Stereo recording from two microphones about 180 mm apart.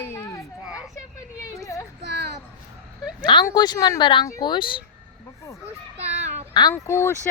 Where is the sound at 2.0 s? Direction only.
70° right (ahead or behind).